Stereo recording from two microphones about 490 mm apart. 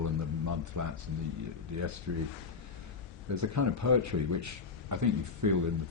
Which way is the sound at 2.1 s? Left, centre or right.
Right.